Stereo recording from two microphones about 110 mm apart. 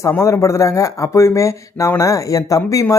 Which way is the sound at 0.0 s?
25° left (ahead or behind).